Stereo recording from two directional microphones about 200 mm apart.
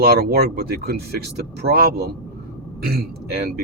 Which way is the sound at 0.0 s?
50° right (ahead or behind).